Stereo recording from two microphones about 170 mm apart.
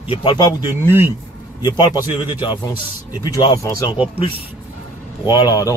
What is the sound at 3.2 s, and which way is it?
Speech, 20° left (ahead or behind).